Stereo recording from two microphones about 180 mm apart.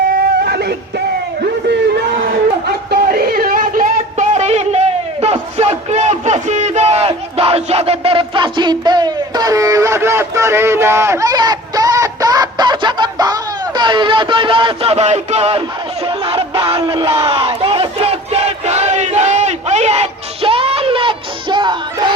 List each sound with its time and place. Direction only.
0.1 s music: 60° right (ahead or behind)
1.6 s a sound: 60° right (ahead or behind); by 15.6 s 35° right (ahead or behind)
16.0 s crowd: 30° right (ahead or behind)